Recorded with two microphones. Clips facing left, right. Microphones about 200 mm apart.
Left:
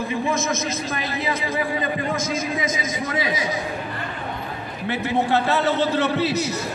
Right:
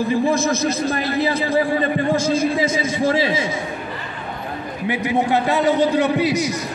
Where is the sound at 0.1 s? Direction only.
35° right (ahead or behind).